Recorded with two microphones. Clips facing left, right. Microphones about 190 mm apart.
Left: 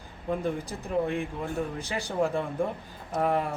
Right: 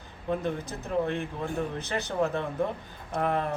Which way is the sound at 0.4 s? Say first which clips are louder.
Left 1 dB; 10° left (ahead or behind).